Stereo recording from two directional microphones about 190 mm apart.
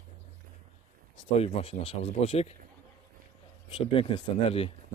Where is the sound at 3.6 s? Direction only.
25° left (ahead or behind).